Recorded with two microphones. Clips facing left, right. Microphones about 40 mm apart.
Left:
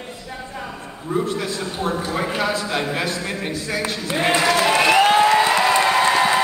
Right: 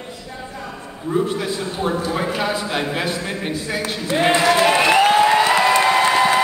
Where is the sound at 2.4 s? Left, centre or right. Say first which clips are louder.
Even; centre.